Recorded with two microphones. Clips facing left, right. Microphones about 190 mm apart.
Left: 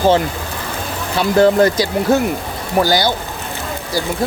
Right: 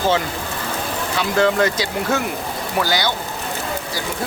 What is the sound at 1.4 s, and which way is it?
Speech, 35° left (ahead or behind).